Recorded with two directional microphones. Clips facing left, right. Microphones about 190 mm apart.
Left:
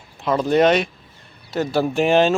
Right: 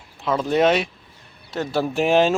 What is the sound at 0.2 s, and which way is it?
Speech, centre (ahead or behind).